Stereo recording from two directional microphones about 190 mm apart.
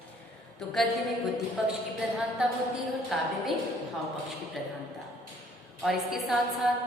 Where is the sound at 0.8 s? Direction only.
Centre (ahead or behind).